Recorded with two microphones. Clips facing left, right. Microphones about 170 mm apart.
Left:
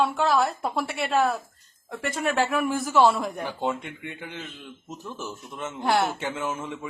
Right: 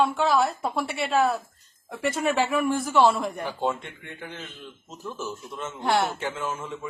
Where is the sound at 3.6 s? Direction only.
15° left (ahead or behind).